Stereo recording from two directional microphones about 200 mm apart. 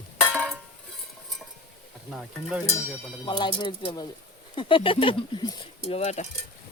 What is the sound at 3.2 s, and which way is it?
Speech, 20° left (ahead or behind).